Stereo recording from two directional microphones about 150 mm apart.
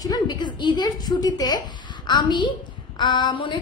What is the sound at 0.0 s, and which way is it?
A woman's voice, 25° left (ahead or behind).